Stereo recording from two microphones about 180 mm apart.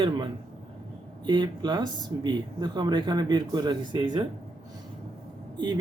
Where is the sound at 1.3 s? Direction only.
25° right (ahead or behind).